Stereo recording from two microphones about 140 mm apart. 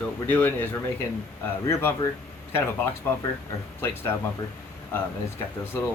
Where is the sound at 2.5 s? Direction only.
15° left (ahead or behind).